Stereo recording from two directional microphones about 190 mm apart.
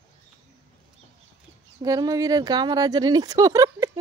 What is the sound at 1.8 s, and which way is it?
Speech, 20° right (ahead or behind).